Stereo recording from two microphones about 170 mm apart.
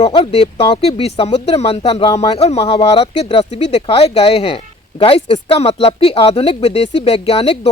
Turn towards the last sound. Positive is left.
turn(degrees=35)  # may be behind; listen again after turning